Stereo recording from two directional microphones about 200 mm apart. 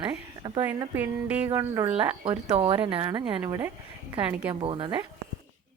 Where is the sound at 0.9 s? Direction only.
5° right (ahead or behind).